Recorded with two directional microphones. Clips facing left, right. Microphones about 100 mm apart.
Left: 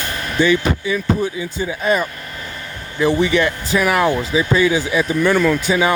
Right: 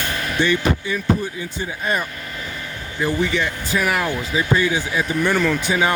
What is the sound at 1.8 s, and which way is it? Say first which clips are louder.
Speech: left 5 dB; 90° left.